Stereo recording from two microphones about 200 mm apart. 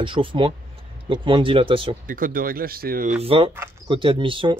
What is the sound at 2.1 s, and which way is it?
Speech, 45° right (ahead or behind).